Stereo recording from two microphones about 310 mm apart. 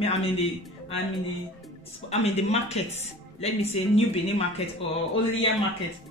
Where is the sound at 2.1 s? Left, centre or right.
Left.